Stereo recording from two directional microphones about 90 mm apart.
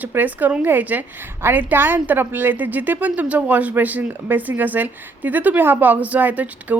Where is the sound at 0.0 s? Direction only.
20° right (ahead or behind).